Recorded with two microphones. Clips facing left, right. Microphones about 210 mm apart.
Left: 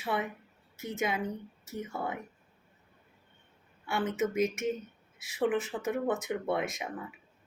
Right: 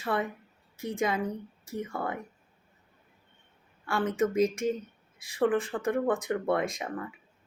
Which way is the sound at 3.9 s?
5° left (ahead or behind).